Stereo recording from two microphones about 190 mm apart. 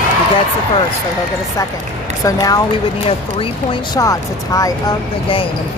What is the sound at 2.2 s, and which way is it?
Speech, 20° left (ahead or behind).